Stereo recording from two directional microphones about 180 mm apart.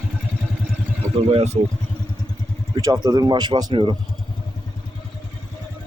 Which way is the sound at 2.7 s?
20° right (ahead or behind).